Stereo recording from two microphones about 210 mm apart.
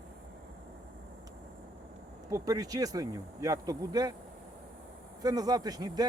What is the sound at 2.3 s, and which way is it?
Speech, 15° right (ahead or behind).